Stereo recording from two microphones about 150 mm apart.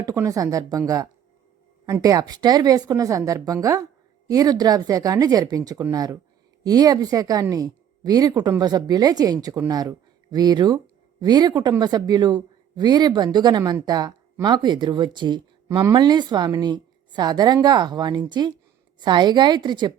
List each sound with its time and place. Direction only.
0.0 s speech: 25° right (ahead or behind)